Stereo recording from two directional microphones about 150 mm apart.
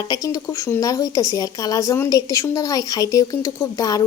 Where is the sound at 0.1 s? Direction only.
25° left (ahead or behind).